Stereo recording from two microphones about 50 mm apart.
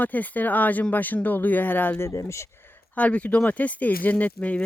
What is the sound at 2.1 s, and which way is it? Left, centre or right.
Speech, left.